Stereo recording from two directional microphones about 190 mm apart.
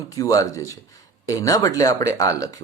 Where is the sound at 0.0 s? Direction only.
20° left (ahead or behind).